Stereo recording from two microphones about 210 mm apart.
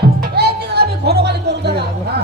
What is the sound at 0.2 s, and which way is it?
Music, 50° right (ahead or behind).